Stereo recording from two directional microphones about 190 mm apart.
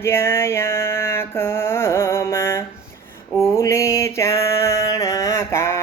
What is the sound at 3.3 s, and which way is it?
Mantra, 15° left (ahead or behind).